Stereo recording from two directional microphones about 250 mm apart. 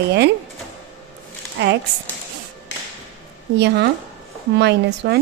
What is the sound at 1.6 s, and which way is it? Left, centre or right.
Speech, right.